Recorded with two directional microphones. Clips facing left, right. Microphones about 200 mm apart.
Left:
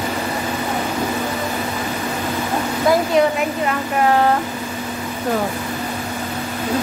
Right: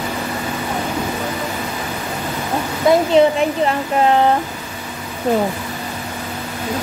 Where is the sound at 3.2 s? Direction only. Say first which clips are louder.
Right 4 dB; 25° right (ahead or behind).